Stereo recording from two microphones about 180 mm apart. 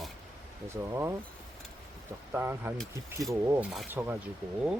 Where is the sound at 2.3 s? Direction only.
15° right (ahead or behind).